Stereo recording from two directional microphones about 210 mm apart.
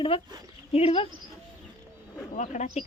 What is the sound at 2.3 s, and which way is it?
Speech, 35° left (ahead or behind).